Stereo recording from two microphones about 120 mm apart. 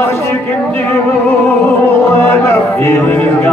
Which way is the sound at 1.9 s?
20° left (ahead or behind).